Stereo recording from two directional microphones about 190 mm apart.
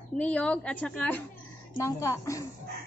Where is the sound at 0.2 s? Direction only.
5° left (ahead or behind).